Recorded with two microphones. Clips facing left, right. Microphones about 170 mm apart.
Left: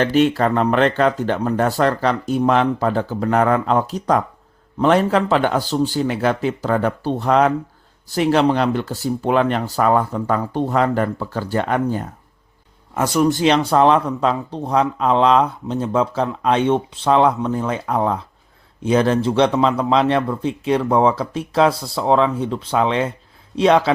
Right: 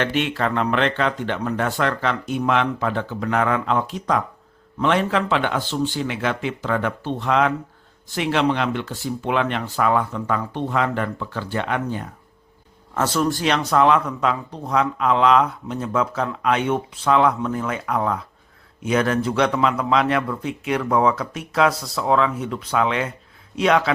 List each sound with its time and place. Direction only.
0.0 s speech: 40° left (ahead or behind)
12.9 s speech: 15° left (ahead or behind)
13.4 s a man's voice: 30° left (ahead or behind)